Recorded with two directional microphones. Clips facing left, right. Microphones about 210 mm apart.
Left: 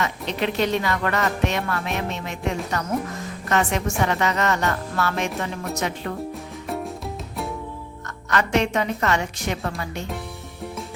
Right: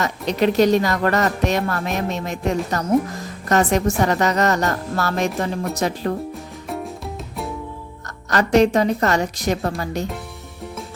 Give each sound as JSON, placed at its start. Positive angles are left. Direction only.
{"t": 0.0, "sound": "a woman's voice", "side_deg": -40}
{"t": 6.7, "sound": "music", "side_deg": 0}
{"t": 8.3, "sound": "a woman's voice", "side_deg": -35}